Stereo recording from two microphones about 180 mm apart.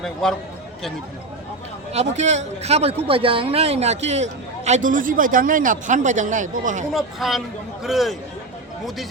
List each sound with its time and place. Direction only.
0.0 s speech: 5° left (ahead or behind)
1.9 s speech: 40° right (ahead or behind)
6.9 s speech: centre (ahead or behind)